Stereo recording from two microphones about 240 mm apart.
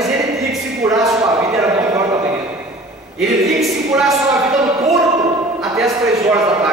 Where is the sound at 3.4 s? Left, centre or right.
Centre.